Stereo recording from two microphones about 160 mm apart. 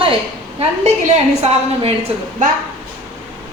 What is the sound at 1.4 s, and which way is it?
Speech, 40° right (ahead or behind).